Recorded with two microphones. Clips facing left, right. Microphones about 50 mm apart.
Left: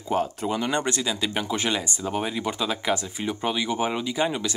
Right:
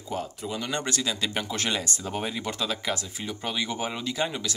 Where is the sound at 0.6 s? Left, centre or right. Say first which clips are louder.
Left 3 dB; left.